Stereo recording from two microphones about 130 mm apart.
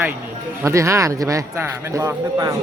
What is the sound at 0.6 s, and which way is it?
Speech, 20° right (ahead or behind).